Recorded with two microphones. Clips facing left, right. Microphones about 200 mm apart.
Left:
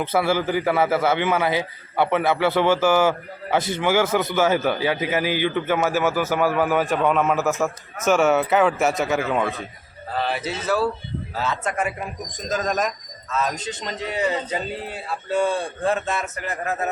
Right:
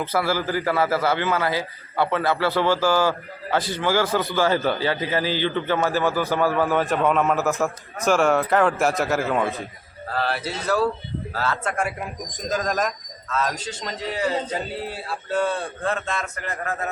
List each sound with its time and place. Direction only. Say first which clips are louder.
0.0 s a man's voice: left 2 dB; 25° left (ahead or behind)
6.8 s a man's voice: even; centre (ahead or behind)
10.2 s a man's voice: left 1 dB; 15° left (ahead or behind)
15.3 s a man's voice: left 2 dB; 10° left (ahead or behind)